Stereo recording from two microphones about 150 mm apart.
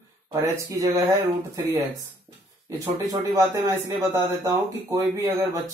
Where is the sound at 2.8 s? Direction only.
20° right (ahead or behind).